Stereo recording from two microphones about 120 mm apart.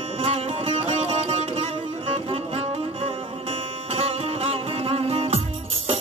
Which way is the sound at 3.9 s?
55° right (ahead or behind).